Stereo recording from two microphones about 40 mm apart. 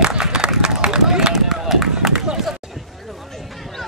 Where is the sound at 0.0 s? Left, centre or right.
Right.